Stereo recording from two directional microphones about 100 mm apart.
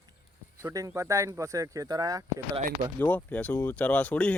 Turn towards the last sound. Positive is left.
turn(degrees=15)  # may be behind; listen again after turning